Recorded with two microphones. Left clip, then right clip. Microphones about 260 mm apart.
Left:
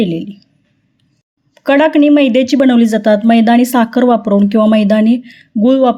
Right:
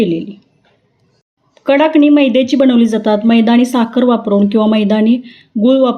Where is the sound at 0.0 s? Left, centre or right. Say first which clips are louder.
Right 2 dB; left.